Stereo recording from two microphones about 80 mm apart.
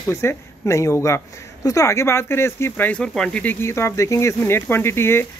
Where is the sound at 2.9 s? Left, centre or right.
Centre.